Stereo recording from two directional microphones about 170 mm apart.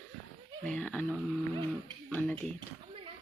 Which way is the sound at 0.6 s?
5° left (ahead or behind).